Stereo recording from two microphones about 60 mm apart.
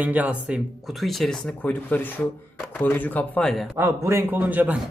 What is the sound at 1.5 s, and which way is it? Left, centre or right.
Speech, left.